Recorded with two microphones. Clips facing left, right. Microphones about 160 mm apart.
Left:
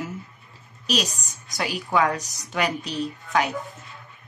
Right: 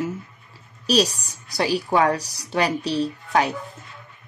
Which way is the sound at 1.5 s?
35° right (ahead or behind).